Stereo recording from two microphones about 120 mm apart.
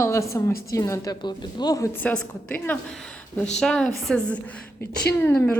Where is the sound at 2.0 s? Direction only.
15° left (ahead or behind).